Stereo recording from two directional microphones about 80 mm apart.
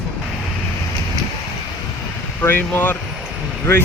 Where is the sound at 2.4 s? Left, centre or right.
Left.